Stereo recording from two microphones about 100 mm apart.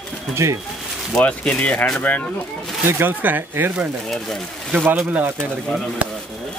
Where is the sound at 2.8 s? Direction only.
25° right (ahead or behind).